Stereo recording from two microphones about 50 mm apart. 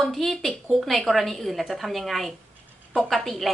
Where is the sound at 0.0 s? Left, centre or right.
Centre.